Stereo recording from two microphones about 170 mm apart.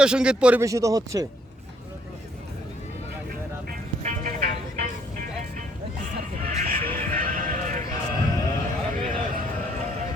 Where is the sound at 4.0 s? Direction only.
55° right (ahead or behind).